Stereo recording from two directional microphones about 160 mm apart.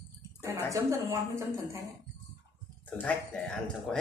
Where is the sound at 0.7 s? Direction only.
15° right (ahead or behind).